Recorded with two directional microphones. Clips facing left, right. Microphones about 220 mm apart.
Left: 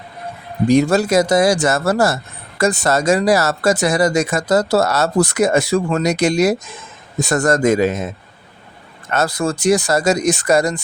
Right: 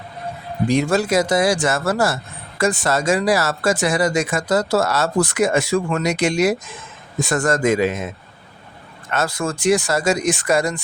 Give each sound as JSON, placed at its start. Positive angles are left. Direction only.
{"t": 0.7, "sound": "speech", "side_deg": 40}
{"t": 9.0, "sound": "speech", "side_deg": 40}